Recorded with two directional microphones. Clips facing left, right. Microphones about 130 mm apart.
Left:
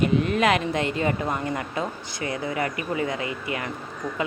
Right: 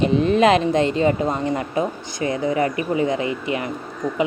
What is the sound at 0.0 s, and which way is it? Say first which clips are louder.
Speech: right 5 dB; 25° right (ahead or behind).